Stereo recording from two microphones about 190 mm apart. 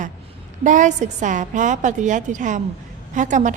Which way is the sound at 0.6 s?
40° right (ahead or behind).